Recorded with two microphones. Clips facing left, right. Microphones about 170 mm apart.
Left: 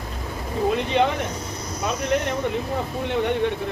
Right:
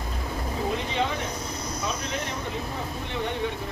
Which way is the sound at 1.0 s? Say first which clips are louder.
Left 8 dB; 65° left (ahead or behind).